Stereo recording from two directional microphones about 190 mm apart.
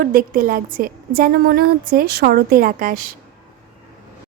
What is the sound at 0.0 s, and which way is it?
Speech, 50° right (ahead or behind).